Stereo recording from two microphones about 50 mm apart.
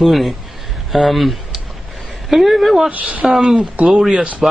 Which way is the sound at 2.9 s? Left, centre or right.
Right.